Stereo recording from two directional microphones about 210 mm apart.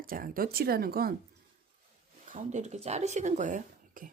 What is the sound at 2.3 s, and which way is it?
Speech, 35° right (ahead or behind).